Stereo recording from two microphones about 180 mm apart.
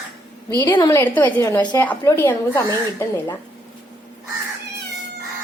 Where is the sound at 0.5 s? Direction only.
20° left (ahead or behind).